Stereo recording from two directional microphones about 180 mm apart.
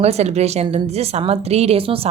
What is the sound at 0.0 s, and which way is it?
A woman's voice, 35° right (ahead or behind).